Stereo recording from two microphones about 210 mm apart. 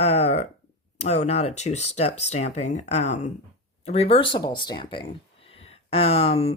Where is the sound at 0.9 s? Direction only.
30° left (ahead or behind).